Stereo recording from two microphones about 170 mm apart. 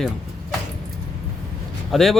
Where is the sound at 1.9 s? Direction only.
Centre (ahead or behind).